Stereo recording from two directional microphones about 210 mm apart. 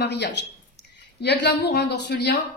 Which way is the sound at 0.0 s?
55° left (ahead or behind).